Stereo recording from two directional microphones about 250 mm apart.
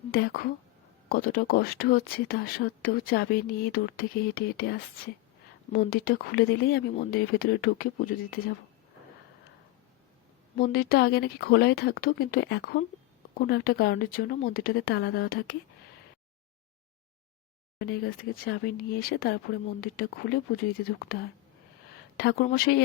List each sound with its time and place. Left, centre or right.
0.1 s speech: left
10.6 s speech: left
17.7 s speech: left